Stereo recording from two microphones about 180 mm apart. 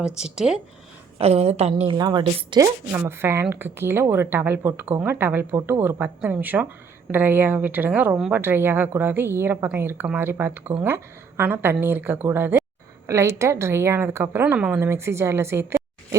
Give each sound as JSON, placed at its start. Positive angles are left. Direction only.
{"t": 0.0, "sound": "speech", "side_deg": -5}
{"t": 1.2, "sound": "a woman's voice", "side_deg": -35}
{"t": 2.0, "sound": "a woman's voice", "side_deg": -25}
{"t": 2.9, "sound": "speech", "side_deg": -10}